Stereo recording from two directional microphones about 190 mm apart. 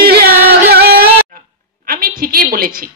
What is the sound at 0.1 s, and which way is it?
Music, 55° right (ahead or behind).